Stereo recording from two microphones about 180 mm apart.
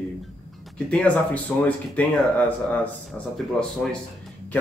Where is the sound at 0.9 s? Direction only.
5° left (ahead or behind).